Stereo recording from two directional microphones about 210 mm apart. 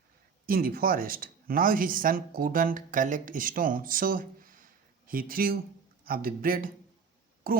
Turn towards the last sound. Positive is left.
turn(degrees=-45)  # may be behind; listen again after turning